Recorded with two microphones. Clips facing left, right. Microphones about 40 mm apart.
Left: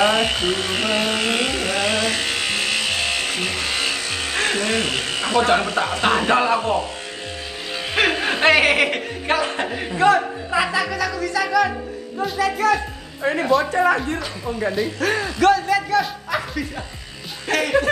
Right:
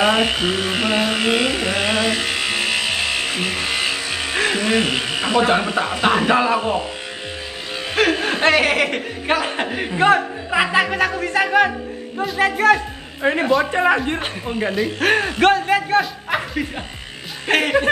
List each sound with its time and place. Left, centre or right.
0.0 s carnatic music: centre
7.9 s speech: centre
9.3 s a man's voice: right
9.9 s a woman's voice: right